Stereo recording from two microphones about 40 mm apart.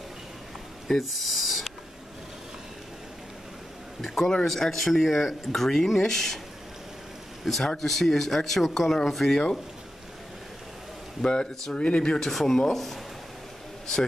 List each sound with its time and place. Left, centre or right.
0.8 s speech: centre
4.0 s speech: centre
7.4 s speech: centre
11.2 s speech: centre
12.2 s speech: centre